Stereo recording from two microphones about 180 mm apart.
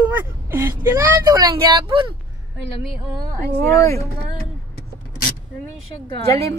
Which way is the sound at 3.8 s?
15° left (ahead or behind).